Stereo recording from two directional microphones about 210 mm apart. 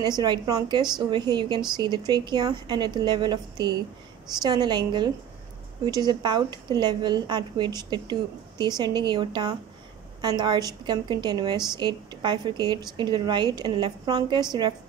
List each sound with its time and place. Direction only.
0.0 s a woman's voice: 20° right (ahead or behind)